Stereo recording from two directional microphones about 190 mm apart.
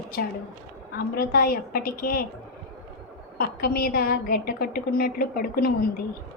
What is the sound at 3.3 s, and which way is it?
A woman's voice, 55° left (ahead or behind).